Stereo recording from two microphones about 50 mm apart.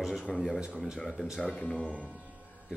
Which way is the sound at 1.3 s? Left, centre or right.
Centre.